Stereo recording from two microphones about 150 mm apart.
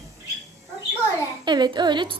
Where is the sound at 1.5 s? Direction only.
30° right (ahead or behind).